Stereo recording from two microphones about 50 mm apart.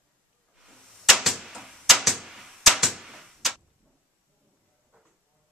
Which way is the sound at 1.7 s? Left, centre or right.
Centre.